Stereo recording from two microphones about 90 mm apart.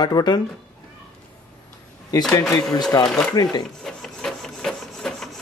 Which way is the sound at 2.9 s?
40° left (ahead or behind).